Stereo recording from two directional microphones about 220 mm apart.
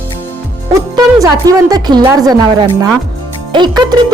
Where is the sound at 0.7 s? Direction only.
15° right (ahead or behind).